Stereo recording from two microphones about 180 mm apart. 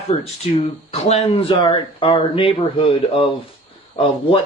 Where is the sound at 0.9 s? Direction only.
35° left (ahead or behind).